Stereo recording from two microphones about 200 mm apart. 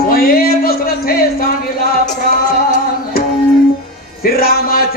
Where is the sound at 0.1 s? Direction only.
45° left (ahead or behind).